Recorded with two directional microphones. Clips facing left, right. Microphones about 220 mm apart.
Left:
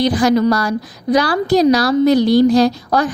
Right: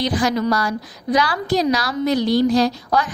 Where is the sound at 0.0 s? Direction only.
35° left (ahead or behind).